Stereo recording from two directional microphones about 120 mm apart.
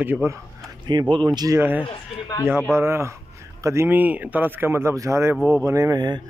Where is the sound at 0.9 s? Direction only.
40° right (ahead or behind).